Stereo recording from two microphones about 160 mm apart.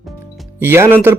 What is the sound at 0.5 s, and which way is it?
Speech, 15° right (ahead or behind).